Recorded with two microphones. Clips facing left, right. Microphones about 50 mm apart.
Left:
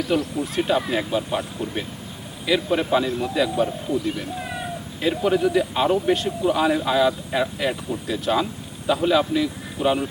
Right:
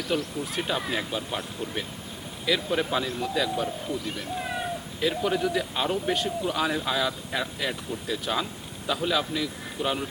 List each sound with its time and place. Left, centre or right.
0.0 s speech: centre
4.9 s speech: centre